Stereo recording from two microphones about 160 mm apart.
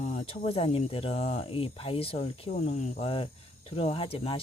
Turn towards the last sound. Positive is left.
turn(degrees=35)  # may be behind; listen again after turning